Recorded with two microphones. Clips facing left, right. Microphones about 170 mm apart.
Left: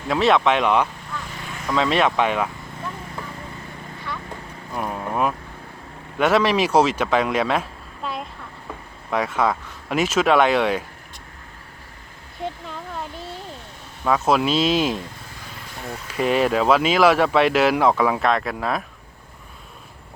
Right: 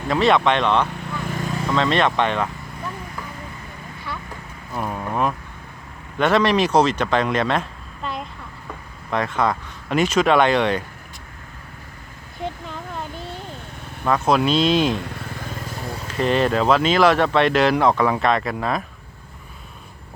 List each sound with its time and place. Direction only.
0.1 s speech: centre (ahead or behind)
1.3 s vehicle: 40° right (ahead or behind)
1.7 s speech: 5° left (ahead or behind)
4.7 s speech: 5° left (ahead or behind)
12.4 s a sound: centre (ahead or behind)
14.0 s speech: 5° left (ahead or behind)
14.9 s vehicle: 70° right (ahead or behind)
15.4 s vehicle: 45° right (ahead or behind)
16.1 s speech: 5° left (ahead or behind)